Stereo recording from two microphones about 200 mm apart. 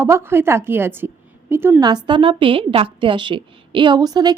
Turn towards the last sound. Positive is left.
turn(degrees=-20)  # may be behind; listen again after turning